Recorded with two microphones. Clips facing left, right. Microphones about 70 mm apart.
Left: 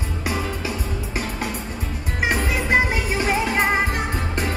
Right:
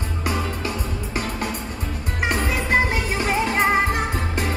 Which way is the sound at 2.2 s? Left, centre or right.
Centre.